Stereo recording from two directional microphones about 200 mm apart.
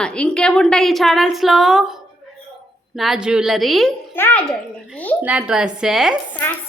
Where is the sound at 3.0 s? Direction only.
Centre (ahead or behind).